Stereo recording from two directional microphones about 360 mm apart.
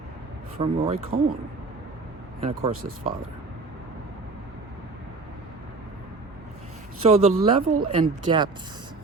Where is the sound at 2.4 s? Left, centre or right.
Centre.